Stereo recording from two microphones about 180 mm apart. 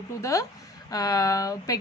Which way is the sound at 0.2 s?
15° left (ahead or behind).